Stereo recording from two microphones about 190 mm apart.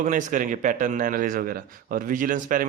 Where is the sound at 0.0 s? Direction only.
45° right (ahead or behind).